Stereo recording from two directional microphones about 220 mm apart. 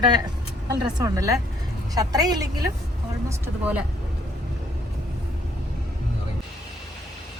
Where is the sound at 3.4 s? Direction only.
5° right (ahead or behind).